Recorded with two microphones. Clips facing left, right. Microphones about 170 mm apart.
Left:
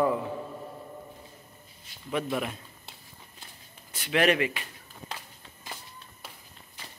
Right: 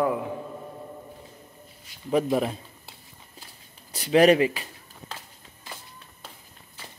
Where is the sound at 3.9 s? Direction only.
35° right (ahead or behind).